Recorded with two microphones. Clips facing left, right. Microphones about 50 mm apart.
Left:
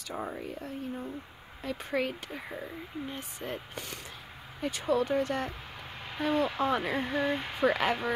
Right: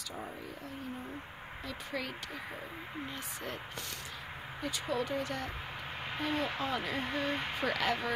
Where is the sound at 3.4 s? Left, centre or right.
Left.